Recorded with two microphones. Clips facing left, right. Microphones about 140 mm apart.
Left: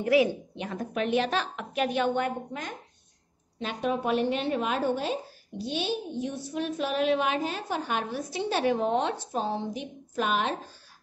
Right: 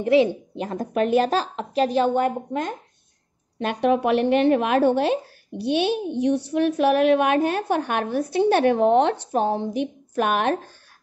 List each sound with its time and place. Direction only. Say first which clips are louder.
0.0 s a woman's voice: right 5 dB; 25° right (ahead or behind)
0.6 s a woman's voice: right 9 dB; 40° right (ahead or behind)
3.5 s speech: right 9 dB; 65° right (ahead or behind)